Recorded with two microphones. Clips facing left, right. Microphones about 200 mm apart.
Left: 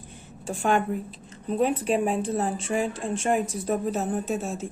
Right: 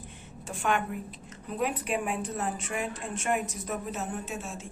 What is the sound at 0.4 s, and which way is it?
A woman's voice, 30° left (ahead or behind).